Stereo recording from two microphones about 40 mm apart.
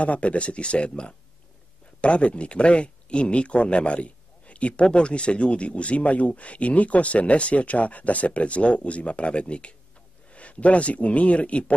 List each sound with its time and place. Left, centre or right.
0.0 s speech: left